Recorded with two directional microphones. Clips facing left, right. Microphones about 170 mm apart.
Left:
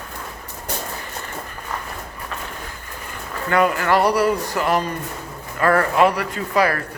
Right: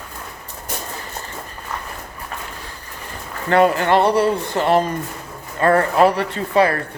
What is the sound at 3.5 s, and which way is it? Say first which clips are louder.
Speech: right 3 dB; 30° right (ahead or behind).